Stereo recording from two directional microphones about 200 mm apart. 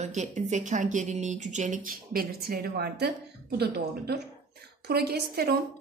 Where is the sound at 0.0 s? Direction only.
35° right (ahead or behind).